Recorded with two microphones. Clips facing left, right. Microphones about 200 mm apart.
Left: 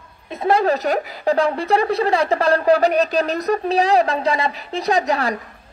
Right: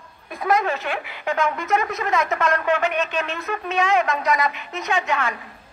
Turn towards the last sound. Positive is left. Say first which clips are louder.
# left 5 dB
turn(degrees=35)  # may be behind; listen again after turning